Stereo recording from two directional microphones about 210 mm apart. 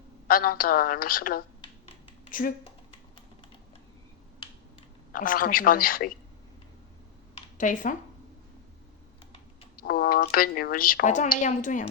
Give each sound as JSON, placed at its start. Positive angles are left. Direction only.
{"t": 0.3, "sound": "speech", "side_deg": 45}
{"t": 5.1, "sound": "speech", "side_deg": 40}
{"t": 7.3, "sound": "a sound", "side_deg": 40}
{"t": 9.7, "sound": "speech", "side_deg": 45}